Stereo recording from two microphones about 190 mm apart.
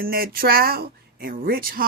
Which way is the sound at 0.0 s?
50° right (ahead or behind).